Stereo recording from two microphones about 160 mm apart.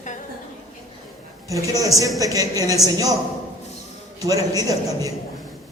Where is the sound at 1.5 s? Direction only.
20° right (ahead or behind).